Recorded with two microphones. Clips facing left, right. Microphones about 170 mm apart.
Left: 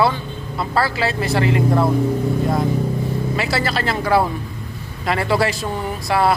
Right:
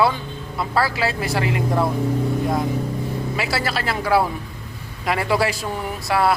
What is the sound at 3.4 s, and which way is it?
A man's voice, 5° right (ahead or behind).